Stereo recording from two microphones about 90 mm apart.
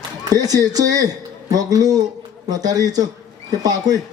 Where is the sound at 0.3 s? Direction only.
45° right (ahead or behind).